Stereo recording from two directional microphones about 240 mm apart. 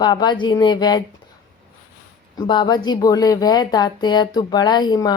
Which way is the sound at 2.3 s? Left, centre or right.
Centre.